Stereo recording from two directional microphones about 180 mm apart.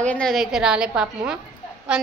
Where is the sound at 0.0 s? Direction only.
5° left (ahead or behind).